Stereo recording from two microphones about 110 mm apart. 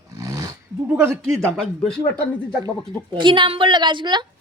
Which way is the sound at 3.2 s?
45° right (ahead or behind).